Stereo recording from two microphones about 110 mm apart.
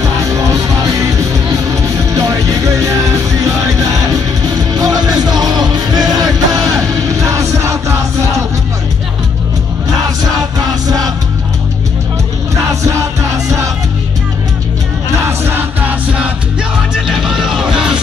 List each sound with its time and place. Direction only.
1.5 s music: 30° right (ahead or behind)
4.6 s music: 35° right (ahead or behind)
15.2 s music: 20° right (ahead or behind)
17.1 s music: 5° right (ahead or behind)